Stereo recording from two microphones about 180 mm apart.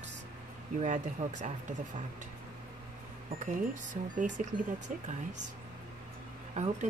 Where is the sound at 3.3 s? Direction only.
45° right (ahead or behind).